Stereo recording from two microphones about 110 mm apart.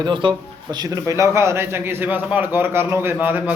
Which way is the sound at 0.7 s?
35° right (ahead or behind).